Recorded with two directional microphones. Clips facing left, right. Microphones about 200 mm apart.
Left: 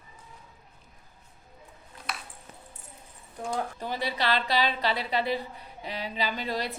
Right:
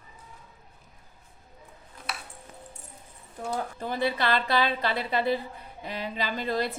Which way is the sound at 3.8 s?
50° right (ahead or behind).